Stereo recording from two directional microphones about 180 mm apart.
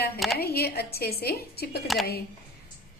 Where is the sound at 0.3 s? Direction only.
60° left (ahead or behind).